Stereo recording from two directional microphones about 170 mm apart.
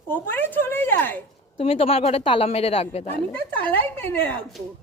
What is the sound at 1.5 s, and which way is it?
A woman's voice, 35° left (ahead or behind).